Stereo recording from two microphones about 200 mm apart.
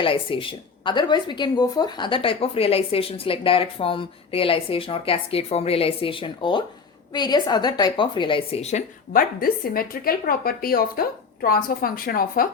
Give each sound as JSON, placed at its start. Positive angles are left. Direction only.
{"t": 0.0, "sound": "a woman's voice", "side_deg": 25}
{"t": 9.1, "sound": "a woman's voice", "side_deg": 45}